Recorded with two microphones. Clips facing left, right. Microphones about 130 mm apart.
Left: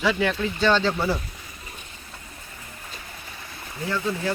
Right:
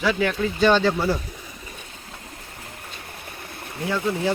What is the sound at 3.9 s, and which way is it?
Speech, 15° right (ahead or behind).